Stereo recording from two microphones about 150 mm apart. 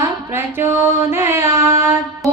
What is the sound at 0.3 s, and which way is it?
Mantra, 15° right (ahead or behind).